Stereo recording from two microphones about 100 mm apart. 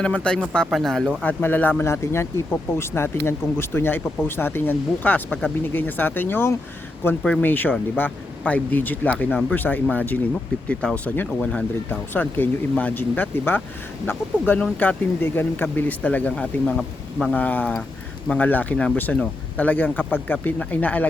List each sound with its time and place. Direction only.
0.0 s speech: 10° left (ahead or behind)
1.2 s speech: 15° left (ahead or behind)
17.3 s speech: 15° left (ahead or behind)